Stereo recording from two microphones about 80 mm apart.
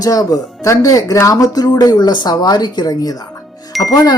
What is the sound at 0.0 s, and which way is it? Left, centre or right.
Speech, left.